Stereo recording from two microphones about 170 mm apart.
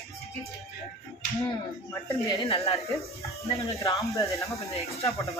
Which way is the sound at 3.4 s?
20° left (ahead or behind).